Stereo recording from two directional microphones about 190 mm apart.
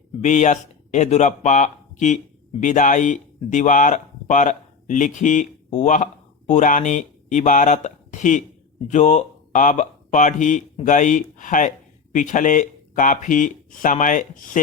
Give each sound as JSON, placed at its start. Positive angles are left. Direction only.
{"t": 0.2, "sound": "speech", "side_deg": 40}